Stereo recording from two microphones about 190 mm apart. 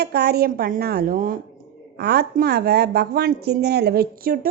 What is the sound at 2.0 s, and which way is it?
A woman's voice, 60° right (ahead or behind).